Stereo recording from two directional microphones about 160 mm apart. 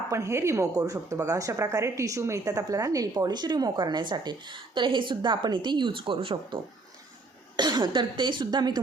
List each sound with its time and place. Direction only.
0.1 s speech: 20° right (ahead or behind)